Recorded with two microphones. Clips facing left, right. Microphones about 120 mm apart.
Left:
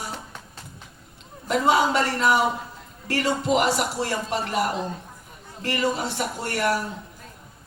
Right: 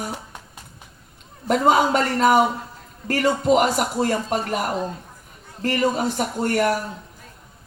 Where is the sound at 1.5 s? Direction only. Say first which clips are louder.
Right 3 dB; 45° right (ahead or behind).